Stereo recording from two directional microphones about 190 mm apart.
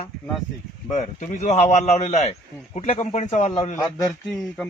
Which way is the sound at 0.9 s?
40° left (ahead or behind).